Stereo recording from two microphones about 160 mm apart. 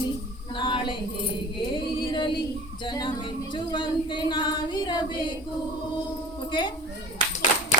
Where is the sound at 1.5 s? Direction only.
30° left (ahead or behind).